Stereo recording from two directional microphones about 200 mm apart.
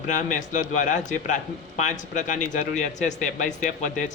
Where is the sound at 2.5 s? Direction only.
40° left (ahead or behind).